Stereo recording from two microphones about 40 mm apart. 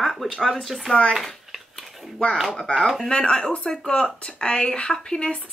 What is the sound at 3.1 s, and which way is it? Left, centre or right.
Speech, centre.